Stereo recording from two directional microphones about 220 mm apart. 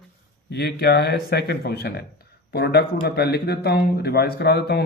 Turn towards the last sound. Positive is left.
turn(degrees=45)  # may be behind; listen again after turning